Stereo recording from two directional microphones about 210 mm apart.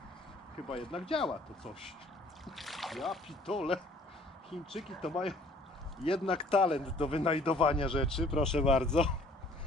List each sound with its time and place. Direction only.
0.7 s speech: 25° left (ahead or behind)
2.4 s speech: centre (ahead or behind)
3.5 s speech: 25° left (ahead or behind)
4.8 s speech: centre (ahead or behind)
6.2 s speech: 25° left (ahead or behind)
8.0 s speech: centre (ahead or behind)